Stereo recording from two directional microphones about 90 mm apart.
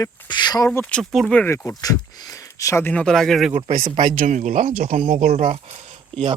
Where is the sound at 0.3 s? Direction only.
55° left (ahead or behind).